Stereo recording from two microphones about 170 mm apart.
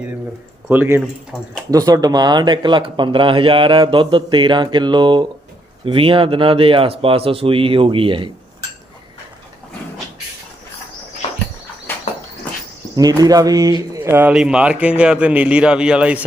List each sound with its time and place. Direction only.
0.7 s speech: 10° right (ahead or behind)
1.7 s speech: 20° right (ahead or behind)
11.9 s a sound: 10° left (ahead or behind)
13.0 s speech: 20° right (ahead or behind)